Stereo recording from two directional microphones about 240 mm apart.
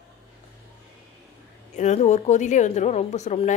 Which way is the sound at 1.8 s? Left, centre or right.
Left.